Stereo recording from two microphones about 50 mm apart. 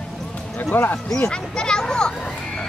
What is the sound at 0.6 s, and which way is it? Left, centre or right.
Speech, left.